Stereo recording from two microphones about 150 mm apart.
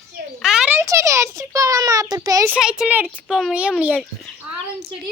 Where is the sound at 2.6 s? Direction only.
5° right (ahead or behind).